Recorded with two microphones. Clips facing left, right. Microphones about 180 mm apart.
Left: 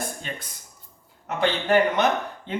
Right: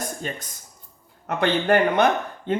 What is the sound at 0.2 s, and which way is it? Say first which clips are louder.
Speech: right 4 dB; 45° right (ahead or behind).